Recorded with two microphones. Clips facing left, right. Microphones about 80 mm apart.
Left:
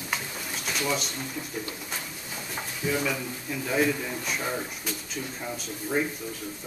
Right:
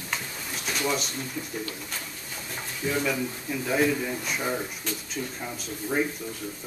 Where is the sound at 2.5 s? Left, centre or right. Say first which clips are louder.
Even; centre.